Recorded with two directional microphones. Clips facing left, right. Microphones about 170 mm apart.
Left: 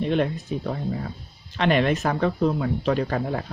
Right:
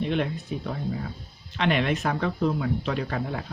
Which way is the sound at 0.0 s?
40° left (ahead or behind).